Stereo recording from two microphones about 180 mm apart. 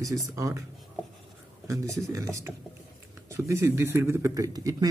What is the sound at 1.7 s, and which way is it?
Speech, 15° right (ahead or behind).